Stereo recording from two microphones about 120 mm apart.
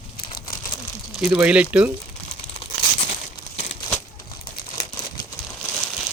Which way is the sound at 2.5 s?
55° left (ahead or behind).